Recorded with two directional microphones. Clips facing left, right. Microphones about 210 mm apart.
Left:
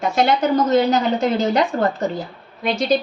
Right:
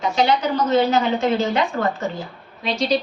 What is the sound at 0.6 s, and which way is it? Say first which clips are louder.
Speech: left 1 dB; 40° left (ahead or behind).